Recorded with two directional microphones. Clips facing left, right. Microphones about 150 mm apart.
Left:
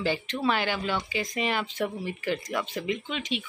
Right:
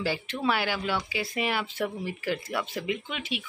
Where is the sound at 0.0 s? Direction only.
10° right (ahead or behind).